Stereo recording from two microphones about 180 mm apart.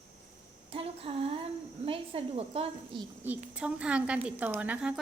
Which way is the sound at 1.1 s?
35° right (ahead or behind).